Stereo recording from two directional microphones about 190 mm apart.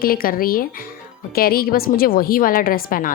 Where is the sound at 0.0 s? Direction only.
50° left (ahead or behind).